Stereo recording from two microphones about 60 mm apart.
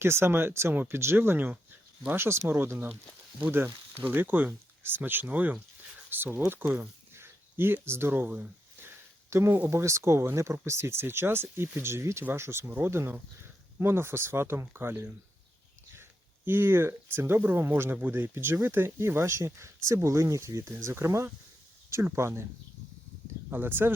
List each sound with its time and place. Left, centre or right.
0.0 s speech: right
9.3 s speech: right
16.5 s speech: right
23.5 s speech: right